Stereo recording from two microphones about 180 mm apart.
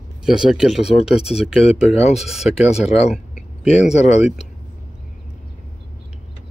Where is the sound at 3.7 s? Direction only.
5° right (ahead or behind).